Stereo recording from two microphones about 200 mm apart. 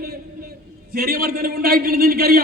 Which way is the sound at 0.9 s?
50° right (ahead or behind).